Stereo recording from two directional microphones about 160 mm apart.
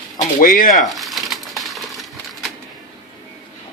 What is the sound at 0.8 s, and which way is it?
Crumpling, centre (ahead or behind).